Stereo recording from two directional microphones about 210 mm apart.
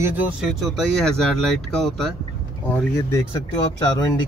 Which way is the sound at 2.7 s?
15° left (ahead or behind).